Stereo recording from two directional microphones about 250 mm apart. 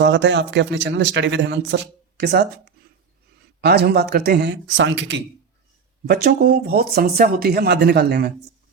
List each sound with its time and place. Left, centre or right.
0.0 s speech: right